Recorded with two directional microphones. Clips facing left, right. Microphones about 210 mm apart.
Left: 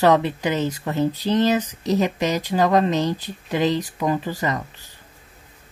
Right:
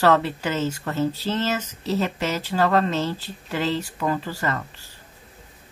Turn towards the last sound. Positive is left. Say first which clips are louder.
# left 2 dB
turn(degrees=15)  # may be behind; listen again after turning